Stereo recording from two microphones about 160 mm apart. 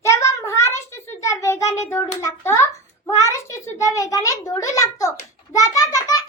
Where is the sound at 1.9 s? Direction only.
15° left (ahead or behind).